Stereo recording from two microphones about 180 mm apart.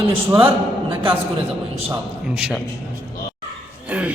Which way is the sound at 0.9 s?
30° right (ahead or behind).